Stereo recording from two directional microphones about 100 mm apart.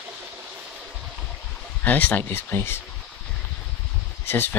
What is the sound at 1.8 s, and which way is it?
Speech, 15° left (ahead or behind).